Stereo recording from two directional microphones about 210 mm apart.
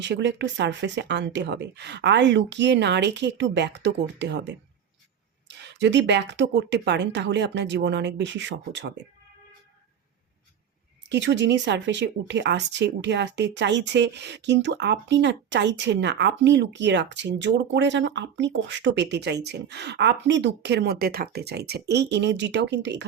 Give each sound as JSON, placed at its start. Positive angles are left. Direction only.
{"t": 0.0, "sound": "speech", "side_deg": -55}
{"t": 11.1, "sound": "speech", "side_deg": -55}